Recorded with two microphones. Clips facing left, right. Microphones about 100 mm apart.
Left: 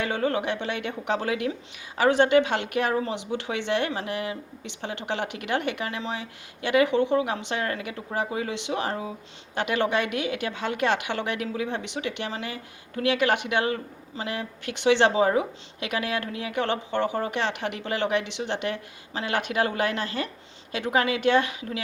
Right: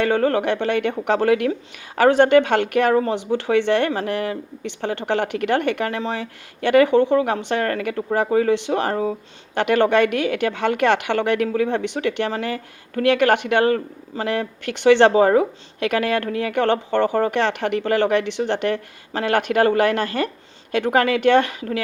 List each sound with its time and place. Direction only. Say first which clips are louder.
0.0 s speech: right 7 dB; 55° right (ahead or behind)